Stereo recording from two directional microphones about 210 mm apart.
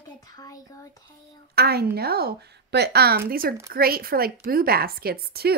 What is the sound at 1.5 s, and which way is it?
Speech, 50° right (ahead or behind).